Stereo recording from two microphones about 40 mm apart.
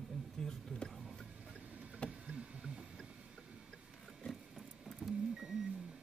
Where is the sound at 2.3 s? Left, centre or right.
Right.